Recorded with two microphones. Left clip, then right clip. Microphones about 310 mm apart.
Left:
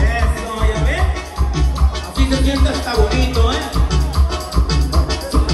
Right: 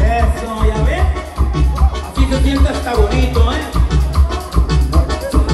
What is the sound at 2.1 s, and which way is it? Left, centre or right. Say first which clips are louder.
Music: right 1 dB; centre.